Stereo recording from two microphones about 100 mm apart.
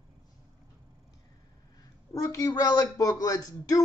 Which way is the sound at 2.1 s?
35° left (ahead or behind).